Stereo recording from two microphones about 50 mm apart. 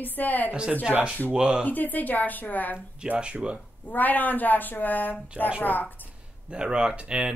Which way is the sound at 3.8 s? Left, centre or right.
Left.